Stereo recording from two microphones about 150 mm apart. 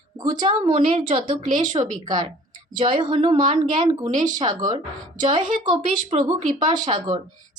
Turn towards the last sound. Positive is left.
turn(degrees=-30)  # may be behind; listen again after turning